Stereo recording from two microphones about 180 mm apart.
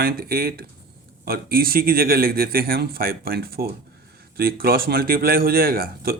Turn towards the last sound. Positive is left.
turn(degrees=-55)  # may be behind; listen again after turning